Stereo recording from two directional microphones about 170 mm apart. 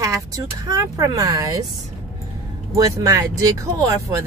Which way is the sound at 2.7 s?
20° right (ahead or behind).